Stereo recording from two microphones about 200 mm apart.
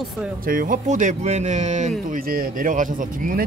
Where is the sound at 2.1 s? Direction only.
45° right (ahead or behind).